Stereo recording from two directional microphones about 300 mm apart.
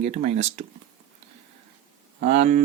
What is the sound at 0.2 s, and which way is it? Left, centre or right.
Speech, right.